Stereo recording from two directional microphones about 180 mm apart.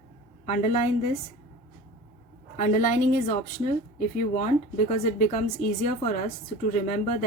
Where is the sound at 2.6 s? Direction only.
45° left (ahead or behind).